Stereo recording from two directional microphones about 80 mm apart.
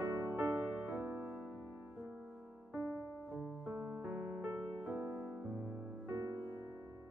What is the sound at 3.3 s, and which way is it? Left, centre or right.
Music, right.